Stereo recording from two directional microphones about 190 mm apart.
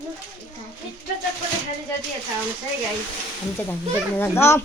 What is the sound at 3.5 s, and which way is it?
A woman's voice, 10° left (ahead or behind).